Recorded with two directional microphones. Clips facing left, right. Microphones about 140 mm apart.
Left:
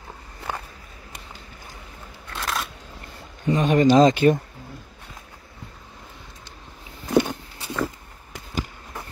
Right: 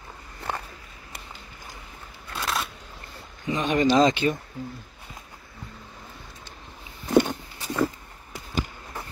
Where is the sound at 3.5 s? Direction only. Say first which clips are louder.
Left 4 dB; 40° left (ahead or behind).